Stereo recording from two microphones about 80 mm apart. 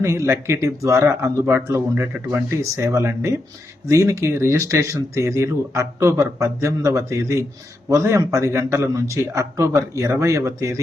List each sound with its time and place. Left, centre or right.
0.0 s speech: right